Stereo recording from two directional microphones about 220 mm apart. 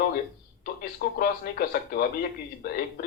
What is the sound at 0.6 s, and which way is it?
Speech, 45° left (ahead or behind).